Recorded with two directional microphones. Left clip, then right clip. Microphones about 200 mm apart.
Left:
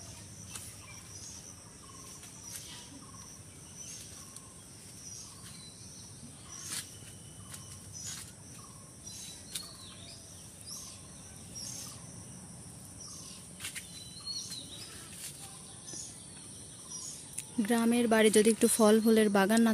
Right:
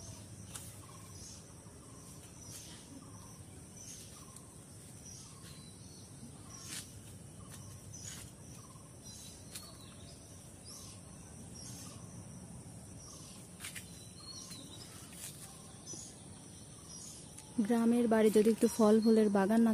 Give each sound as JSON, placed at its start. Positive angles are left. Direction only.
{"t": 17.6, "sound": "speech", "side_deg": 0}